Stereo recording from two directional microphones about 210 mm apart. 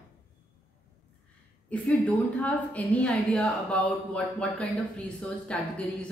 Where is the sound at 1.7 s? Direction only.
5° left (ahead or behind).